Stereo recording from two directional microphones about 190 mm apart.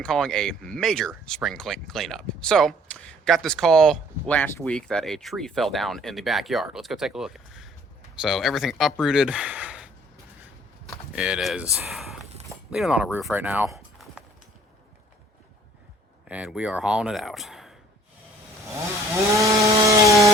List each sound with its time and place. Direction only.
0.0 s speech: 5° left (ahead or behind)
11.1 s speech: 5° right (ahead or behind)
16.3 s speech: 5° right (ahead or behind)
19.1 s chainsaw: 15° right (ahead or behind)